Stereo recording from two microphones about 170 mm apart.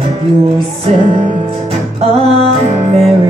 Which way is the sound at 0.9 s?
40° right (ahead or behind).